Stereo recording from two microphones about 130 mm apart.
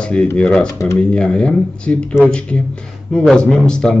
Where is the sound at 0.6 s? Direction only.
25° left (ahead or behind).